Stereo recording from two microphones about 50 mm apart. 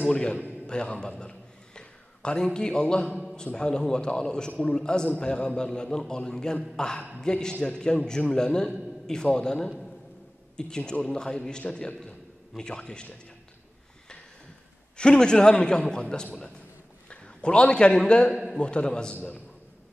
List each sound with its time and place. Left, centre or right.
0.0 s a man's voice: left
15.0 s a man's voice: centre
18.3 s a man's voice: centre
18.6 s a man's voice: centre